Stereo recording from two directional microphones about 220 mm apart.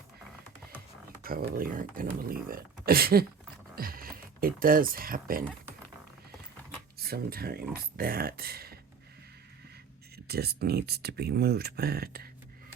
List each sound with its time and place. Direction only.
1.2 s speech: 40° right (ahead or behind)
7.0 s speech: 45° right (ahead or behind)
10.2 s speech: 45° right (ahead or behind)